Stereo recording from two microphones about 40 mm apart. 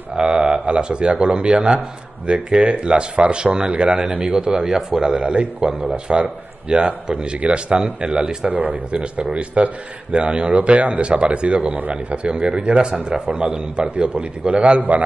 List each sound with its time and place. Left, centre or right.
0.1 s a man's voice: right
6.7 s a man's voice: right
7.1 s a man's voice: right
8.5 s speech: right
8.9 s a man's voice: right